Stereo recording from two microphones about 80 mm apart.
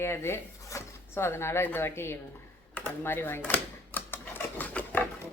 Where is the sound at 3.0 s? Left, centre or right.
Left.